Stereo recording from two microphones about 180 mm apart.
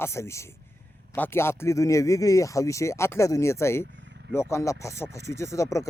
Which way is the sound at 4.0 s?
75° right (ahead or behind).